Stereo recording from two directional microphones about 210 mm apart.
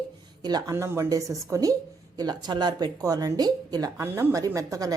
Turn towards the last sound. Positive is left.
turn(degrees=-15)  # may be behind; listen again after turning